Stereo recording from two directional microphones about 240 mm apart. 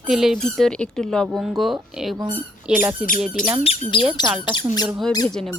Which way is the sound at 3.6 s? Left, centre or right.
Left.